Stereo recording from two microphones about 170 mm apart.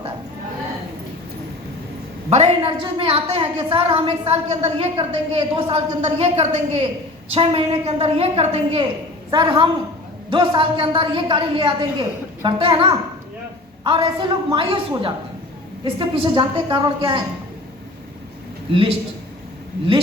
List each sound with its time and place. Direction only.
2.3 s a woman's voice: 35° right (ahead or behind)
18.7 s a woman's voice: 30° right (ahead or behind)